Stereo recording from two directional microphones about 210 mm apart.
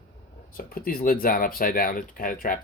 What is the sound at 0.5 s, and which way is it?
Speech, 45° left (ahead or behind).